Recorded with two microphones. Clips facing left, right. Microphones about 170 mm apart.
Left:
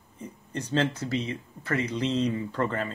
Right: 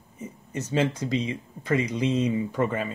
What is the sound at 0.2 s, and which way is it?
Speech, 10° right (ahead or behind).